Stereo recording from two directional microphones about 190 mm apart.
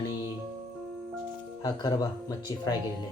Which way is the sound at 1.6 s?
20° left (ahead or behind).